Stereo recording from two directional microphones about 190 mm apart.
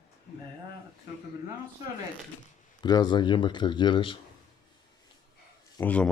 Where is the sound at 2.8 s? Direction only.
20° left (ahead or behind).